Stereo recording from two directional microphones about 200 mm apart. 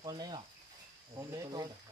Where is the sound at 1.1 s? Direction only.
20° right (ahead or behind).